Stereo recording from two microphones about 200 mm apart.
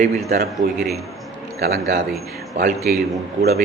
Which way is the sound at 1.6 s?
55° right (ahead or behind).